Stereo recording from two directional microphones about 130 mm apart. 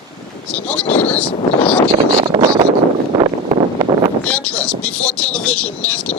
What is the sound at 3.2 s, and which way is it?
Vehicle, 40° right (ahead or behind).